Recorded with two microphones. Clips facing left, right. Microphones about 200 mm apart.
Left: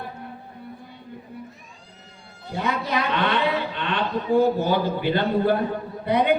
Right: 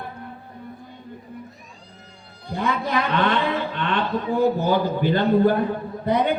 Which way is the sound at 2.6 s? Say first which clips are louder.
Right 2 dB; 50° right (ahead or behind).